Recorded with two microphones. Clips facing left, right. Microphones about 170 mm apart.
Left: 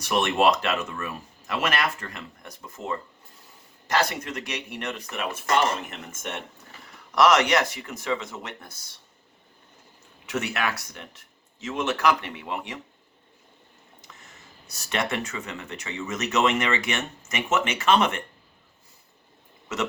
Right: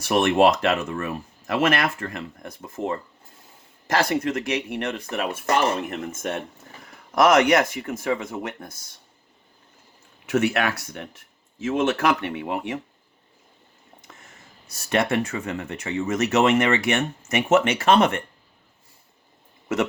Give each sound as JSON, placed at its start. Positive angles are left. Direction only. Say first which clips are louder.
{"t": 0.1, "sound": "speech", "louder": "right 4 dB", "side_deg": -50}
{"t": 10.2, "sound": "speech", "louder": "right 6 dB", "side_deg": -50}
{"t": 14.8, "sound": "speech", "louder": "right 6 dB", "side_deg": -50}
{"t": 19.6, "sound": "speech", "louder": "right 5 dB", "side_deg": -55}